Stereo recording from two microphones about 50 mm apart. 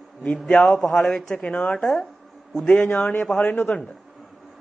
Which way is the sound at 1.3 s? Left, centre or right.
Centre.